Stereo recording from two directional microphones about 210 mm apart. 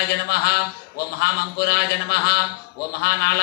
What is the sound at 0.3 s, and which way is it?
A man's voice, 50° left (ahead or behind).